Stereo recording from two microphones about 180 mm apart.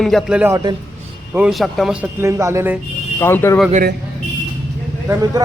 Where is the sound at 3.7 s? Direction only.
55° right (ahead or behind).